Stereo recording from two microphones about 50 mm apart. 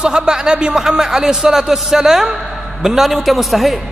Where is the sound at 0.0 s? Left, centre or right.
Centre.